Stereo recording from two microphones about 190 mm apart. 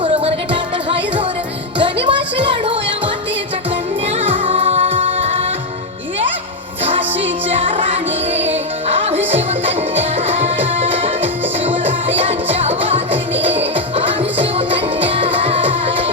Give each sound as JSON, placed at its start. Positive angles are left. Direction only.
{"t": 0.0, "sound": "music", "side_deg": -25}
{"t": 4.2, "sound": "music", "side_deg": -30}
{"t": 7.6, "sound": "music", "side_deg": -30}
{"t": 12.2, "sound": "music", "side_deg": -30}